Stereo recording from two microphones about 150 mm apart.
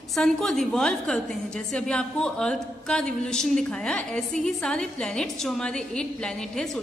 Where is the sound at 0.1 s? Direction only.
5° left (ahead or behind).